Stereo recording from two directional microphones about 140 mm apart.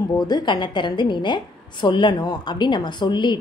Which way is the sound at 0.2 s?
30° left (ahead or behind).